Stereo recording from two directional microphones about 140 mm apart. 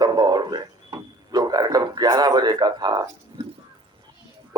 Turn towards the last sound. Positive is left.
turn(degrees=-30)  # may be behind; listen again after turning